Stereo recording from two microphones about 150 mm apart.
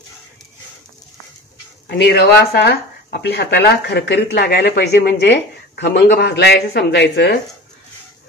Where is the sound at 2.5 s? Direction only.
90° left.